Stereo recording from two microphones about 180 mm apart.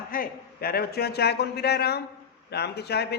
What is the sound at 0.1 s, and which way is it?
A woman's voice, 55° left (ahead or behind).